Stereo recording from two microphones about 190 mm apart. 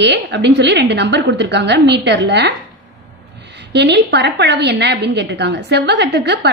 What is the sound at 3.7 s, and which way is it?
A woman's voice, 65° right (ahead or behind).